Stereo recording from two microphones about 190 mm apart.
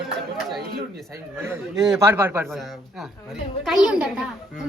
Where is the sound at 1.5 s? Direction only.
20° right (ahead or behind).